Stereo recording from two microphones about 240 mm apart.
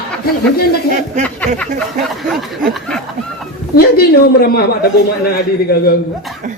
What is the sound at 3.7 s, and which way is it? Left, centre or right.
Speech, left.